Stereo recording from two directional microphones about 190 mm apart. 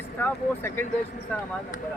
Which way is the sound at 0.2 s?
10° left (ahead or behind).